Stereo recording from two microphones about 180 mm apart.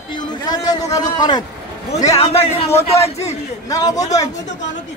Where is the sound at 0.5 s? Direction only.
20° left (ahead or behind).